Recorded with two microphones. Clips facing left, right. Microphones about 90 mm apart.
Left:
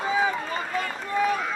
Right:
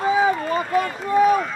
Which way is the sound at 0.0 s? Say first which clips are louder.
Right 6 dB; centre (ahead or behind).